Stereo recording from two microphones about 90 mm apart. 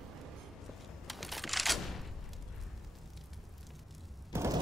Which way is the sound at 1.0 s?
Centre (ahead or behind).